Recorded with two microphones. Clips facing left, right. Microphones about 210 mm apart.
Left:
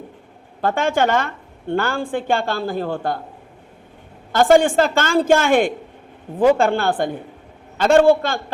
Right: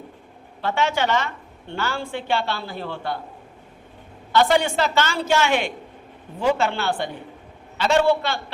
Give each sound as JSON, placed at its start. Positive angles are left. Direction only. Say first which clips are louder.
{"t": 0.6, "sound": "speech", "louder": "left 4 dB", "side_deg": 50}
{"t": 4.3, "sound": "speech", "louder": "left 5 dB", "side_deg": 45}